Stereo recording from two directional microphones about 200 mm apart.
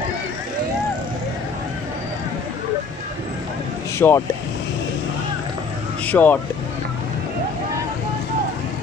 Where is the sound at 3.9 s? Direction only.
15° left (ahead or behind).